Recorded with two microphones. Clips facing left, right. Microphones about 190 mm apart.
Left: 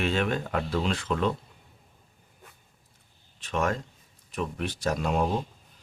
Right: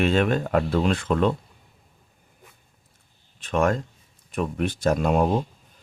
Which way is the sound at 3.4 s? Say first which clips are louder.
Right 6 dB; 50° right (ahead or behind).